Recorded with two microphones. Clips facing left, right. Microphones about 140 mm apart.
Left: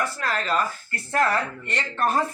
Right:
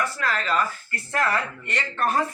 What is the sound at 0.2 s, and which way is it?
Speech, 40° left (ahead or behind).